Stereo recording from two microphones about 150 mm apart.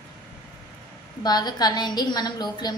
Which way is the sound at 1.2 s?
25° left (ahead or behind).